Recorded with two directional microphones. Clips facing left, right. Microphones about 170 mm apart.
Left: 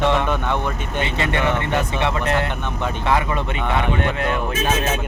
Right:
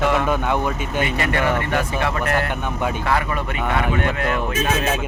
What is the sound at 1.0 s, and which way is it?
Speech, 25° left (ahead or behind).